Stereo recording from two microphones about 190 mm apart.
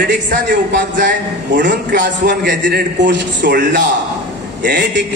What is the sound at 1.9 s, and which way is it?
A man's voice, 50° right (ahead or behind).